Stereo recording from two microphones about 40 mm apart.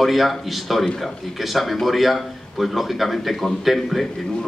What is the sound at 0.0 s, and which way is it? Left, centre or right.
A man's voice, centre.